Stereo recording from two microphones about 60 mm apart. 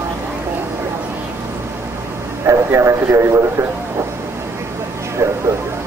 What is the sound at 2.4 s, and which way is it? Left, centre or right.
Speech, right.